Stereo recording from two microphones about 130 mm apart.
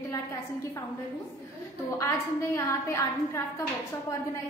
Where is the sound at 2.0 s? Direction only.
20° left (ahead or behind).